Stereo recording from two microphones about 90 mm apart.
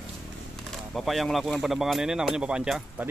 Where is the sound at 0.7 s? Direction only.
Centre (ahead or behind).